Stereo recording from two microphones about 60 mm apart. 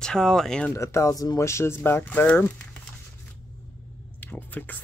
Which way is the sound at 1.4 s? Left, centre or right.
Left.